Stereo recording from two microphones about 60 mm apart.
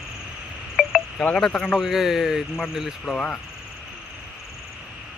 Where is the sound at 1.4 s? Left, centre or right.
Centre.